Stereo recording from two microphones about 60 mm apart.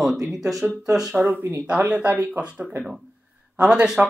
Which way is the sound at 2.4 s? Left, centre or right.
Centre.